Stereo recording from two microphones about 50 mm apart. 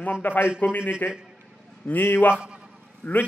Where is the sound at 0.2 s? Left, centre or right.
Left.